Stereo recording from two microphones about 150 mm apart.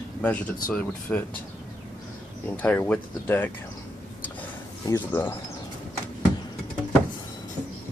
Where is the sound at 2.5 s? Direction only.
10° left (ahead or behind).